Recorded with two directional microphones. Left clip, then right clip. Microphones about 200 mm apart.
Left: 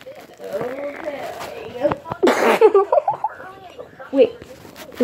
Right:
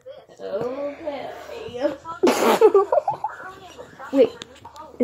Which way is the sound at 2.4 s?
20° right (ahead or behind).